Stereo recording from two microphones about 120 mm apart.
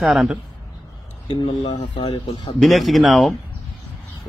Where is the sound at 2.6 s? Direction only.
Centre (ahead or behind).